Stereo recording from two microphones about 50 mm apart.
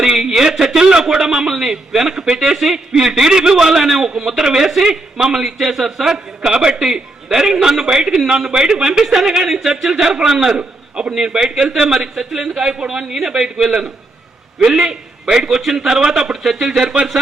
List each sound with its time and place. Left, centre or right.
0.0 s a man's voice: centre
14.8 s a man's voice: centre
16.8 s speech: right